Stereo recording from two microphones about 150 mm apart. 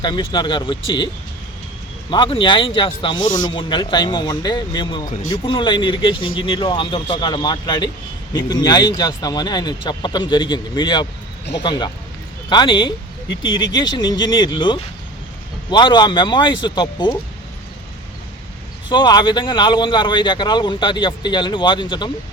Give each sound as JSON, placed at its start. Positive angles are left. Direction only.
{"t": 0.0, "sound": "speech", "side_deg": 30}
{"t": 18.9, "sound": "speech", "side_deg": 30}